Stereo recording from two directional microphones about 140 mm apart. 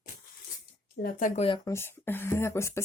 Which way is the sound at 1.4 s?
40° left (ahead or behind).